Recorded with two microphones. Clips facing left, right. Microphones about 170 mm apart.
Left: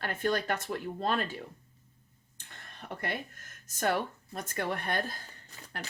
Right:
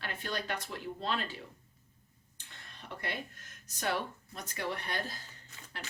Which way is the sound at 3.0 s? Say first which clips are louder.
Left 3 dB; 50° left (ahead or behind).